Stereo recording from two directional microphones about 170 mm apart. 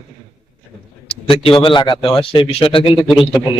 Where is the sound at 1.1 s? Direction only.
35° left (ahead or behind).